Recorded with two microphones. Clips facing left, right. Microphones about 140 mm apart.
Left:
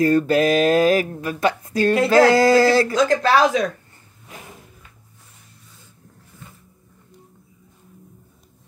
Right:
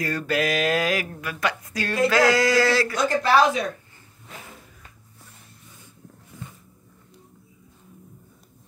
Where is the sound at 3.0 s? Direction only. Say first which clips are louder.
Left 3 dB; 90° left.